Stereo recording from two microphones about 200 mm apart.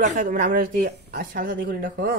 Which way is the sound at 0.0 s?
40° right (ahead or behind).